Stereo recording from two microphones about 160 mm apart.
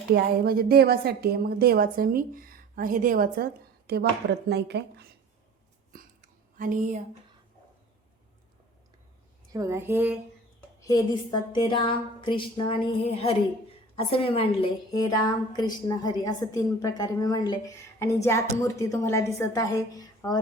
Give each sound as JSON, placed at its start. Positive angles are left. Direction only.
{"t": 0.1, "sound": "a woman's voice", "side_deg": -70}
{"t": 6.6, "sound": "speech", "side_deg": -55}
{"t": 9.5, "sound": "a woman's voice", "side_deg": -20}
{"t": 10.8, "sound": "a woman's voice", "side_deg": 25}
{"t": 14.9, "sound": "a woman's voice", "side_deg": 25}